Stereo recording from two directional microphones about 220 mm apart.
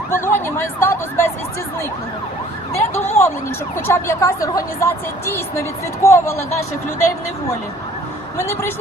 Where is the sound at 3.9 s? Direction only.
10° left (ahead or behind).